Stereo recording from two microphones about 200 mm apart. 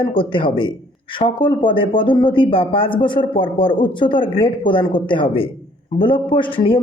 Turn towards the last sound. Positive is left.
turn(degrees=25)  # may be behind; listen again after turning